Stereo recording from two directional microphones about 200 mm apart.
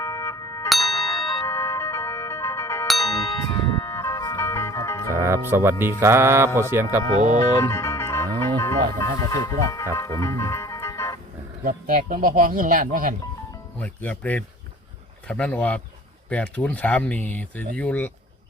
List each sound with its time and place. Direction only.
0.0 s music: 15° left (ahead or behind)
0.7 s a sound: centre (ahead or behind)
1.5 s music: 15° left (ahead or behind)
2.8 s music: centre (ahead or behind)
3.4 s music: 20° left (ahead or behind)
5.1 s speech: 15° right (ahead or behind)
6.0 s music: 10° right (ahead or behind)
7.2 s speech: 40° right (ahead or behind)
7.5 s music: 15° left (ahead or behind)
9.0 s speech: 15° left (ahead or behind)
9.9 s music: 15° left (ahead or behind)
11.6 s speech: 45° right (ahead or behind)
13.7 s speech: 10° left (ahead or behind)